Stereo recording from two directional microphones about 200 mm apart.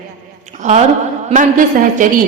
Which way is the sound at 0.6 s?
35° right (ahead or behind).